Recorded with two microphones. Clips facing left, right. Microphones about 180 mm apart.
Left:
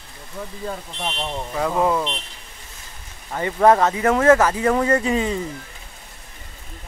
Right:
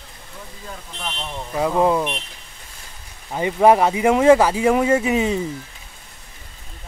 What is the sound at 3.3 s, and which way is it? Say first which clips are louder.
Speech: right 1 dB; 15° right (ahead or behind).